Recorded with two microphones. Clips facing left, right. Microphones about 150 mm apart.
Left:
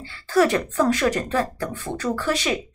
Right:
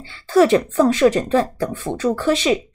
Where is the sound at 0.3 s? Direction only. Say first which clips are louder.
Right 5 dB; 25° right (ahead or behind).